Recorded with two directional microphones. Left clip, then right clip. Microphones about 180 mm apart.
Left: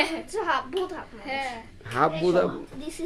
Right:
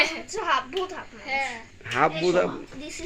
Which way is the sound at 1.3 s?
55° left (ahead or behind).